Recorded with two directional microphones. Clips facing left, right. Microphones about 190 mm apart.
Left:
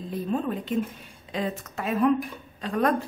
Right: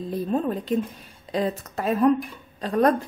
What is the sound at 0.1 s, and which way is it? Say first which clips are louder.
Speech: right 3 dB; 40° right (ahead or behind).